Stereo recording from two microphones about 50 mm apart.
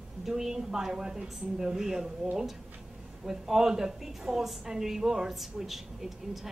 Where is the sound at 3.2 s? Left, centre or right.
Centre.